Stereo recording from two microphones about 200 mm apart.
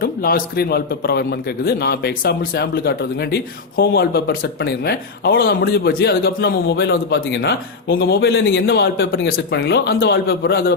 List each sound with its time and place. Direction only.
0.0 s a man's voice: 45° left (ahead or behind); by 9.2 s 65° left (ahead or behind)
9.3 s a man's voice: 50° left (ahead or behind)